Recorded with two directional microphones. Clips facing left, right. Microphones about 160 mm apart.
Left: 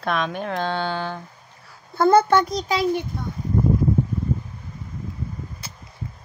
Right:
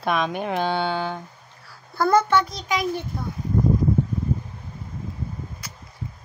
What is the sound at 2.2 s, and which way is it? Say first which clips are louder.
Speech: left 3 dB; 40° left (ahead or behind).